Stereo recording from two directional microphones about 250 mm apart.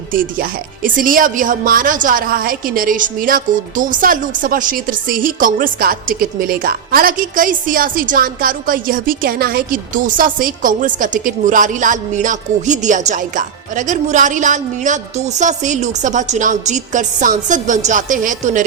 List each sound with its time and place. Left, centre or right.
0.1 s speech: right